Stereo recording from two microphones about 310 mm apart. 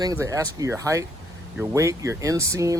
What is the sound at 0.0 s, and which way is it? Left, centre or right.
Speech, centre.